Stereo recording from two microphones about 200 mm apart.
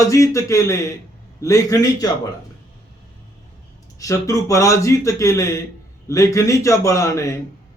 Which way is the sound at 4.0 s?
15° left (ahead or behind).